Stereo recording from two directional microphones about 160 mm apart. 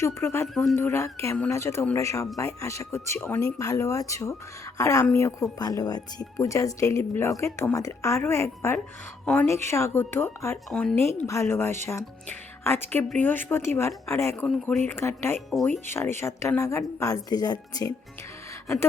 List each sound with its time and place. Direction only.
0.0 s speech: 15° left (ahead or behind)
0.4 s speech: centre (ahead or behind)
0.8 s speech: 15° left (ahead or behind)
10.7 s speech: 5° left (ahead or behind)
10.9 s speech: 15° left (ahead or behind)